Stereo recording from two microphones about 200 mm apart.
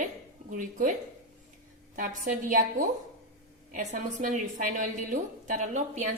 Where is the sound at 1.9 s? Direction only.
40° right (ahead or behind).